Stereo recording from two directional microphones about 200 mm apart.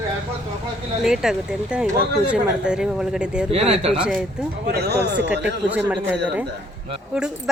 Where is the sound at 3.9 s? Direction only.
5° right (ahead or behind).